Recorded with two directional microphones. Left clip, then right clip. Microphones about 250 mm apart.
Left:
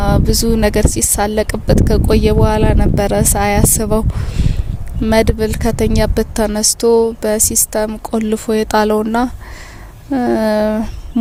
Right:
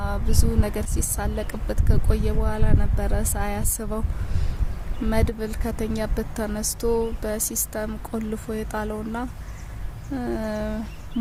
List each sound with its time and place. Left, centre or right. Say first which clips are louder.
0.0 s speech: left 14 dB; left